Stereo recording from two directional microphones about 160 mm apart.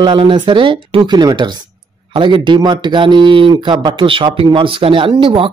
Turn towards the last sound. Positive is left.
turn(degrees=-35)  # may be behind; listen again after turning